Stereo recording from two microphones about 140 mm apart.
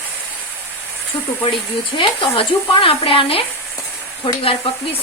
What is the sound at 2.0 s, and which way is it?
Speech, 40° left (ahead or behind).